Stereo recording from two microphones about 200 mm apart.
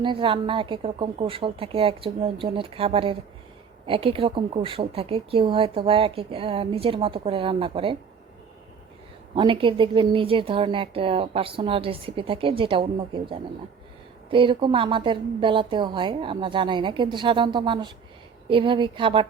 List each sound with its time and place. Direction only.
0.0 s speech: 25° right (ahead or behind)
9.3 s speech: 25° right (ahead or behind)